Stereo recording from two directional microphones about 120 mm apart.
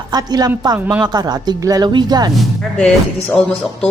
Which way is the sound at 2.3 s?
5° left (ahead or behind).